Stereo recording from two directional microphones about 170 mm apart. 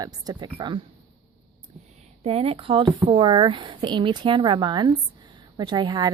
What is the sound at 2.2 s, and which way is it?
Speech, 35° right (ahead or behind).